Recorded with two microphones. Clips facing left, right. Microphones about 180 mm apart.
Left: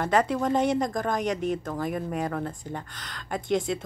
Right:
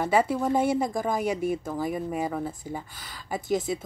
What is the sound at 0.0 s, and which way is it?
Speech, 5° right (ahead or behind).